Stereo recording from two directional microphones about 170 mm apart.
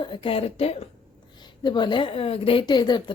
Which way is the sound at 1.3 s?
25° left (ahead or behind).